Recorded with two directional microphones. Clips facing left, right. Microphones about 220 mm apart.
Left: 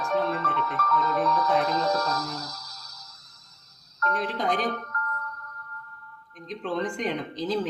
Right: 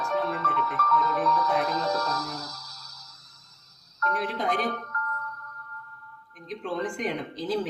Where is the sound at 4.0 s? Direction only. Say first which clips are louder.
Left 1 dB; 40° left (ahead or behind).